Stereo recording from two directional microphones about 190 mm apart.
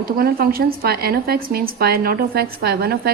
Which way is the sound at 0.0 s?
50° right (ahead or behind).